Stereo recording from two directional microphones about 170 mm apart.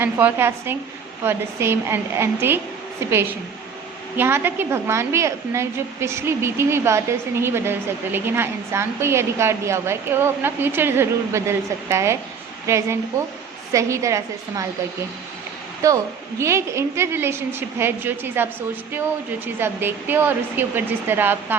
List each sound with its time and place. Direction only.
0.0 s a woman's voice: 10° right (ahead or behind)
15.8 s a woman's voice: 20° right (ahead or behind)
19.5 s a woman's voice: 10° right (ahead or behind)